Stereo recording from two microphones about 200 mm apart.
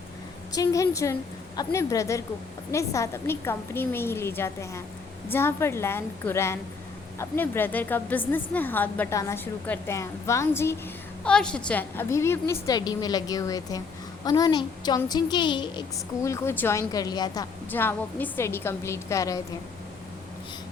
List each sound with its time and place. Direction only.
0.5 s a woman's voice: 15° left (ahead or behind)